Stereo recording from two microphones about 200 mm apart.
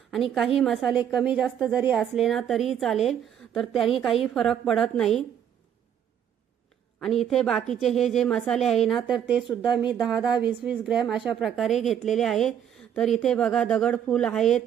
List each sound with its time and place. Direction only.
0.1 s a woman's voice: centre (ahead or behind)
7.0 s a woman's voice: centre (ahead or behind)